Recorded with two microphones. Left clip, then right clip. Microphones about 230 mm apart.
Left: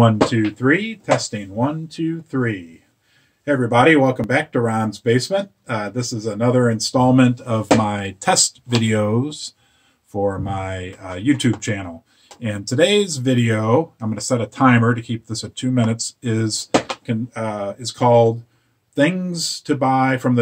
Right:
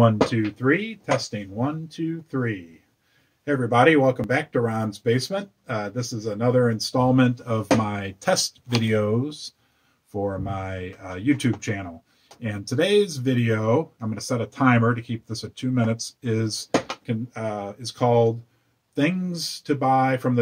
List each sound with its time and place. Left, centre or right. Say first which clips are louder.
0.0 s speech: left 4 dB; centre